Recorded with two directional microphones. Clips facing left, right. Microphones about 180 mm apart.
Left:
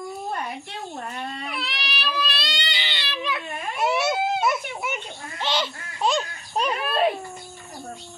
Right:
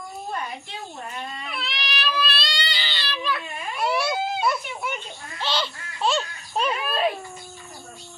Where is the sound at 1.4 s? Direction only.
10° left (ahead or behind).